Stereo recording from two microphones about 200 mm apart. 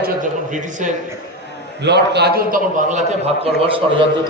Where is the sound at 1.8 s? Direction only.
60° right (ahead or behind).